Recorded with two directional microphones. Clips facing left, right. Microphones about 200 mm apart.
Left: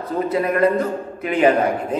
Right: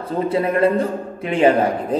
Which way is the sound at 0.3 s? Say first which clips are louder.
Right 1 dB; 30° right (ahead or behind).